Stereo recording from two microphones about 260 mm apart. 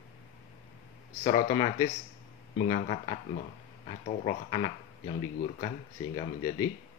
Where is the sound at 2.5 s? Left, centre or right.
Left.